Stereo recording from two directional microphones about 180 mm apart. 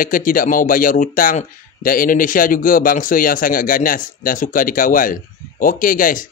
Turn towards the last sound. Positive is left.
turn(degrees=50)  # may be behind; listen again after turning